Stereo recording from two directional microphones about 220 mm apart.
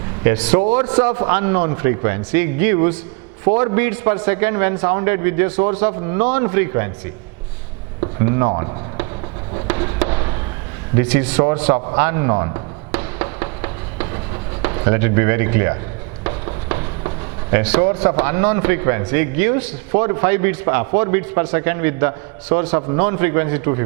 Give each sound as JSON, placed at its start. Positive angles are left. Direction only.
{"t": 0.3, "sound": "a man's voice", "side_deg": -10}
{"t": 8.0, "sound": "speech", "side_deg": -15}
{"t": 9.6, "sound": "a sound", "side_deg": -20}
{"t": 10.9, "sound": "a man's voice", "side_deg": -10}
{"t": 11.9, "sound": "music", "side_deg": -15}
{"t": 14.6, "sound": "speech", "side_deg": -20}
{"t": 16.2, "sound": "a sound", "side_deg": -20}
{"t": 17.5, "sound": "a man's voice", "side_deg": -10}